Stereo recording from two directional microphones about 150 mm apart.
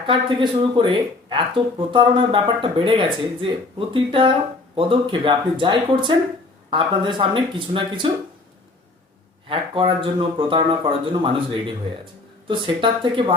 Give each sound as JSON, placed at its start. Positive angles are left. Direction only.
{"t": 0.0, "sound": "speech", "side_deg": -35}
{"t": 9.5, "sound": "speech", "side_deg": -35}